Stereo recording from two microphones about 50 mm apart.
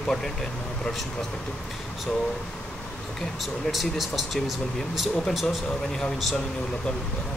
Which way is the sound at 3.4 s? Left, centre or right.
Centre.